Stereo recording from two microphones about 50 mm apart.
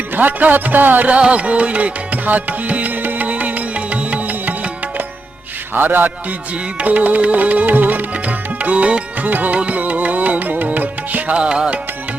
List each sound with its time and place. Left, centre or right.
0.2 s music: right
1.0 s music: right
5.7 s music: right
6.7 s music: right
11.3 s music: centre